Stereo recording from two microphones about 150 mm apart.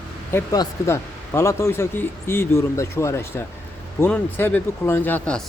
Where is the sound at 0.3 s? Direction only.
15° left (ahead or behind).